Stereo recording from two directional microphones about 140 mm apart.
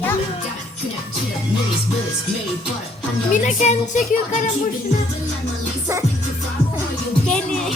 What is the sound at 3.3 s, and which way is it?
Music, 60° left (ahead or behind).